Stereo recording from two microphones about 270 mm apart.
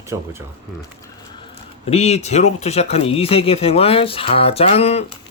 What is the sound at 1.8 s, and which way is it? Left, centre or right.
Speech, left.